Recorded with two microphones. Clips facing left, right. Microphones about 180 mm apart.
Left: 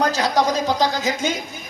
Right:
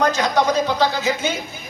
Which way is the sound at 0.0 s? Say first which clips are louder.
Right 1 dB; 40° left (ahead or behind).